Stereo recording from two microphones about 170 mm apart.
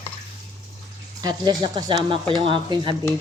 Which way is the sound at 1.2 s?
25° right (ahead or behind).